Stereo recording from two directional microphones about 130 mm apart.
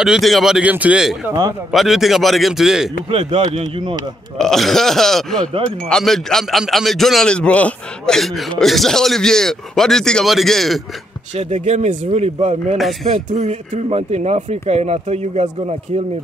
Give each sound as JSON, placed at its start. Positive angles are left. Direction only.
{"t": 0.0, "sound": "a man's voice", "side_deg": 0}
{"t": 3.1, "sound": "speech", "side_deg": -50}
{"t": 4.4, "sound": "a man's voice", "side_deg": 0}
{"t": 11.3, "sound": "speech", "side_deg": -60}